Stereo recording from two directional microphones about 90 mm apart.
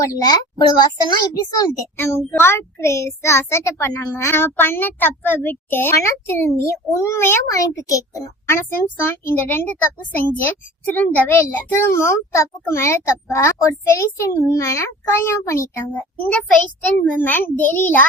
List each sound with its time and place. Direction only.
0.0 s a child's voice: 40° left (ahead or behind)
2.0 s a child's voice: 30° left (ahead or behind)
8.4 s speech: 25° left (ahead or behind)
16.0 s speech: 15° left (ahead or behind)